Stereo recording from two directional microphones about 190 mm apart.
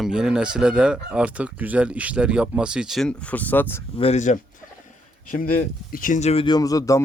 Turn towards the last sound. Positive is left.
turn(degrees=15)  # may be behind; listen again after turning